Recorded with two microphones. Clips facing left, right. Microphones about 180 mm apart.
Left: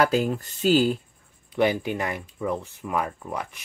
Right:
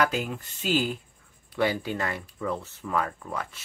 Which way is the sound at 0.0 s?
35° left (ahead or behind).